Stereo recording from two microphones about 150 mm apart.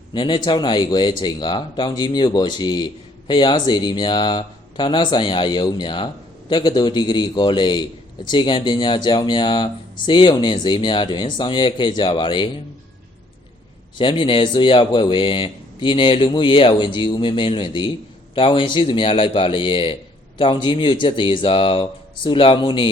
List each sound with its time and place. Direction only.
0.1 s speech: 30° left (ahead or behind)
14.0 s speech: 35° left (ahead or behind)